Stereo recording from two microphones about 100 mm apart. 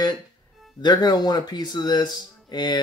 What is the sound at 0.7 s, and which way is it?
Speech, 45° left (ahead or behind).